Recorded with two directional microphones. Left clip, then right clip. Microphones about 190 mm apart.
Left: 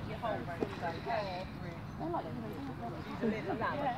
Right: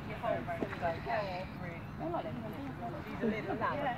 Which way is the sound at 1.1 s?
Centre (ahead or behind).